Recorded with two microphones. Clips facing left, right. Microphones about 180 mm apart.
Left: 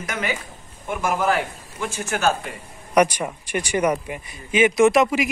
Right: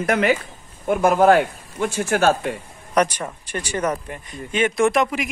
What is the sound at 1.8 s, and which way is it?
Speech, 35° right (ahead or behind).